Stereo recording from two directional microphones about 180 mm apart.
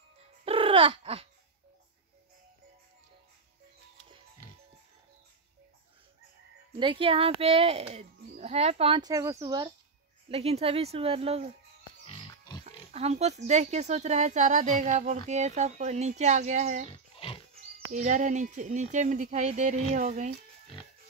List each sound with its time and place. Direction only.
0.5 s laughter: 30° right (ahead or behind)
6.7 s speech: 30° right (ahead or behind)
10.3 s speech: 35° right (ahead or behind)
12.6 s speech: 35° right (ahead or behind)
16.9 s pig: 30° left (ahead or behind)
17.9 s speech: 45° right (ahead or behind)